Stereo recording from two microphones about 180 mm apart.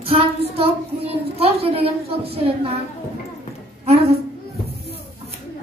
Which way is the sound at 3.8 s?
35° right (ahead or behind).